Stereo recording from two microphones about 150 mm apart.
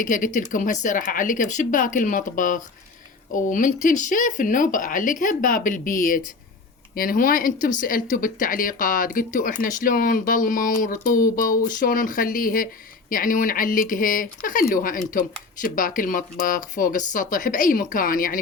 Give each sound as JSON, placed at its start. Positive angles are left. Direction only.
{"t": 0.0, "sound": "speech", "side_deg": 60}